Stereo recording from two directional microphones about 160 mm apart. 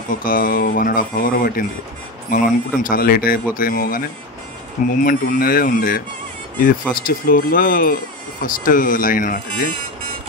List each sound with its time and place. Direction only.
0.1 s speech: 60° left (ahead or behind)
5.0 s speech: 65° left (ahead or behind)